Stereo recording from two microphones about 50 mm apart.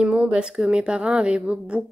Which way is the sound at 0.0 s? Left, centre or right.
Right.